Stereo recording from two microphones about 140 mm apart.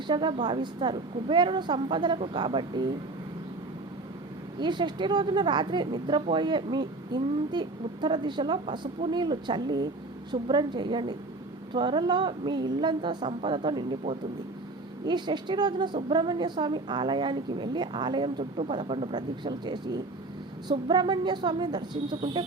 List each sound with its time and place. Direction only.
0.1 s a woman's voice: 35° right (ahead or behind)
4.6 s a woman's voice: 35° right (ahead or behind)
15.0 s a woman's voice: 30° right (ahead or behind)